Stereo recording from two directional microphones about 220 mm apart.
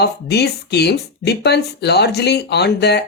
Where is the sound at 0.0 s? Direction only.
50° left (ahead or behind).